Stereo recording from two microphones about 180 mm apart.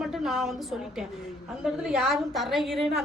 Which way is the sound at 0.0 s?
Centre (ahead or behind).